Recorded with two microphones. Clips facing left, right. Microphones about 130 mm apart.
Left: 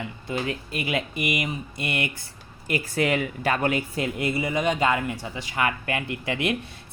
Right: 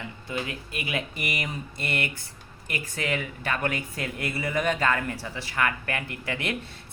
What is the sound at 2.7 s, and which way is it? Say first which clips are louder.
Speech: left 6 dB; 35° left (ahead or behind).